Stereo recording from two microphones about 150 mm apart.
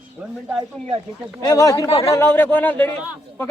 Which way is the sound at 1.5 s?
25° left (ahead or behind).